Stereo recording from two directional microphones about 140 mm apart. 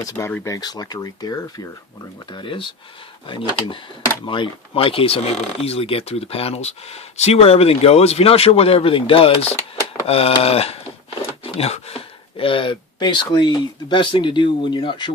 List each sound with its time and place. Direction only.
0.0 s speech: 25° left (ahead or behind)
2.3 s speech: 40° left (ahead or behind)